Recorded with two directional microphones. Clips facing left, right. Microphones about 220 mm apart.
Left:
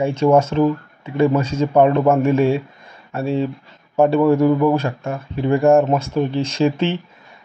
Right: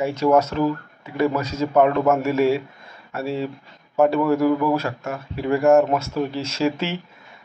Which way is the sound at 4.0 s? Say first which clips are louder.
Left 4 dB; 30° left (ahead or behind).